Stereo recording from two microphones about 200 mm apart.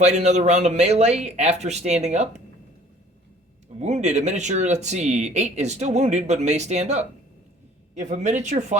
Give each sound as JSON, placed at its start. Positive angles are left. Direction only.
{"t": 0.0, "sound": "speech", "side_deg": -35}
{"t": 3.8, "sound": "speech", "side_deg": -35}